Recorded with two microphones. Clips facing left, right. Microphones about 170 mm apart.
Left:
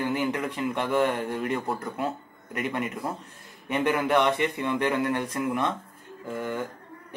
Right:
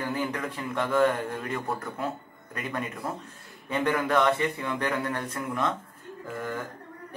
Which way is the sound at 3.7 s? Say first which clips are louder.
Left 2 dB; 25° left (ahead or behind).